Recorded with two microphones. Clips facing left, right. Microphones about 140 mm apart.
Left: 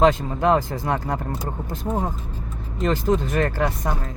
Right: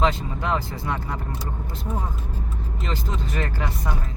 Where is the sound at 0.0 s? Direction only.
45° left (ahead or behind).